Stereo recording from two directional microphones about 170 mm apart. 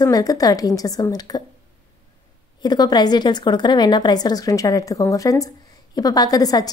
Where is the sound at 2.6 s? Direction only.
25° left (ahead or behind).